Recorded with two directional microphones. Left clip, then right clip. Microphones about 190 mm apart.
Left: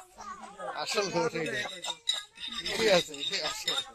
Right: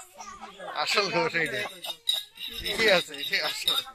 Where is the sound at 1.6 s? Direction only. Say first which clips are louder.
Right 1 dB; 40° left (ahead or behind).